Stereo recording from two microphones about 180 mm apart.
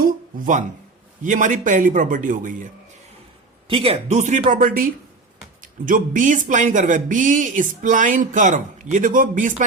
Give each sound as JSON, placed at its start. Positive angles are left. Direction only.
{"t": 0.0, "sound": "a sound", "side_deg": -45}
{"t": 1.2, "sound": "speech", "side_deg": -45}
{"t": 3.7, "sound": "speech", "side_deg": -30}